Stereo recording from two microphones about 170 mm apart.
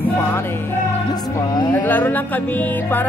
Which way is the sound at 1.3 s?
20° left (ahead or behind).